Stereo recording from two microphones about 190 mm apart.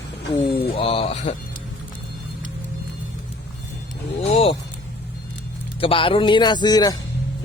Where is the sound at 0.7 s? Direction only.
30° left (ahead or behind).